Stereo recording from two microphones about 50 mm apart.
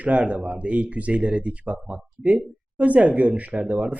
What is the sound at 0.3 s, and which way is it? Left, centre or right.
Speech, right.